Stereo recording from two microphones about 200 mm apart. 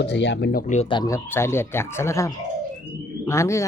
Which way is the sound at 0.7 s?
25° left (ahead or behind).